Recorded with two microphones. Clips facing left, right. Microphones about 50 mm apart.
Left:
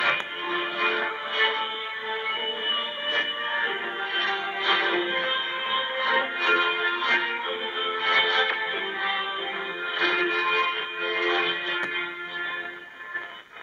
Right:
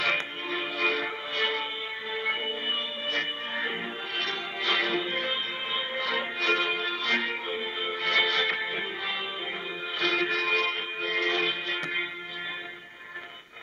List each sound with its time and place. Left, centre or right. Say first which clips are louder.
0.0 s music: left 3 dB; centre
3.1 s music: left 5 dB; left